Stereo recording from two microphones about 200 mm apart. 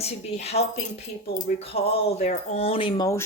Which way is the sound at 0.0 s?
30° left (ahead or behind).